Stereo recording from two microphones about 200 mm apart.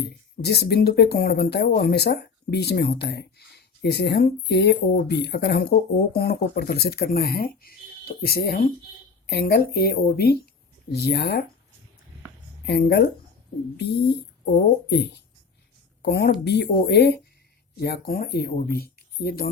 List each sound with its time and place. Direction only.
0.0 s speech: 55° left (ahead or behind)
12.6 s speech: 55° left (ahead or behind)
14.4 s speech: 50° left (ahead or behind)